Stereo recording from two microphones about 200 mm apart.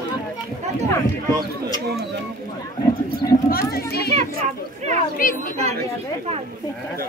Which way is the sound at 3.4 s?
50° left (ahead or behind).